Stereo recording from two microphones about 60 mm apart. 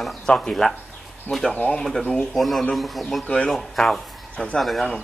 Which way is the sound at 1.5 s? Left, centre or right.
Centre.